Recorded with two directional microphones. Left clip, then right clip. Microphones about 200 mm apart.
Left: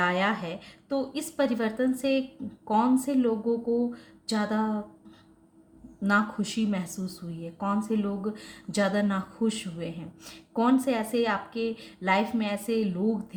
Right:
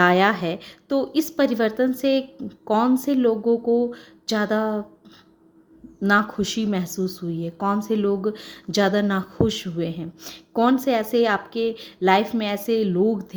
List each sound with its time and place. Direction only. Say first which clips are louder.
0.0 s speech: right 9 dB; 40° right (ahead or behind)
6.0 s speech: right 6 dB; 40° right (ahead or behind)